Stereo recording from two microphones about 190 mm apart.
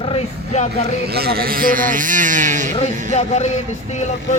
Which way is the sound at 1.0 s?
55° right (ahead or behind).